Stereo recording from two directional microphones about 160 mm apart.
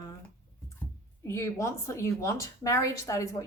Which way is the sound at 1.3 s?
20° left (ahead or behind).